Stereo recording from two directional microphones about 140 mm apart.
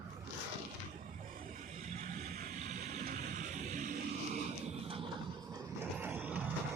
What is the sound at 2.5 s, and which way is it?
Music, 55° right (ahead or behind).